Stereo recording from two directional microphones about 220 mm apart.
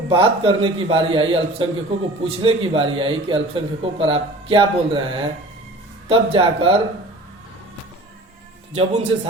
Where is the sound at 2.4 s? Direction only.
25° right (ahead or behind).